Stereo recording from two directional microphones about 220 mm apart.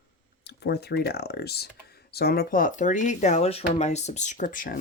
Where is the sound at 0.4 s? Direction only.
50° left (ahead or behind).